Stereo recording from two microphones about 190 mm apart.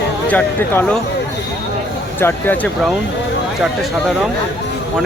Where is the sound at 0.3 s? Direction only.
10° left (ahead or behind).